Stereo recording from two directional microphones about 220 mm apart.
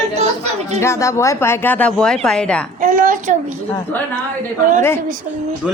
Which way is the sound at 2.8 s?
40° right (ahead or behind).